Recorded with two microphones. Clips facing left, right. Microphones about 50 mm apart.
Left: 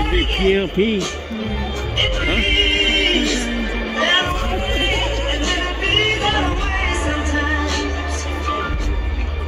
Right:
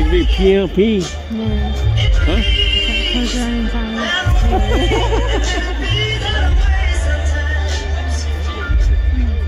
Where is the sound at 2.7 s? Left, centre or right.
Left.